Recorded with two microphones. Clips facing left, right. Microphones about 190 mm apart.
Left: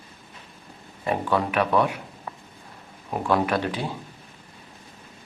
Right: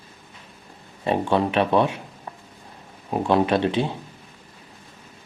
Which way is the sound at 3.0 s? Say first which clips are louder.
Right 3 dB; 25° right (ahead or behind).